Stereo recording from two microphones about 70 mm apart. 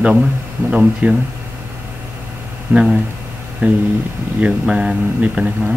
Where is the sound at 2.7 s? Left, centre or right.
Centre.